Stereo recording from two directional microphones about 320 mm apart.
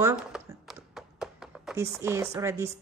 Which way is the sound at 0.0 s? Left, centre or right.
Centre.